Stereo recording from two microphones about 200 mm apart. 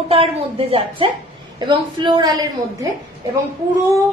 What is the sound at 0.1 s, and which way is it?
A woman's voice, 30° right (ahead or behind).